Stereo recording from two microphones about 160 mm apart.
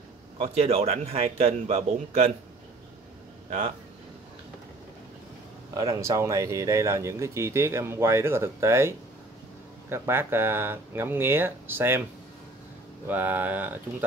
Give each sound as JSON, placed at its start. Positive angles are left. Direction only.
{"t": 0.4, "sound": "a man's voice", "side_deg": -40}
{"t": 5.9, "sound": "speech", "side_deg": -20}
{"t": 13.0, "sound": "speech", "side_deg": -10}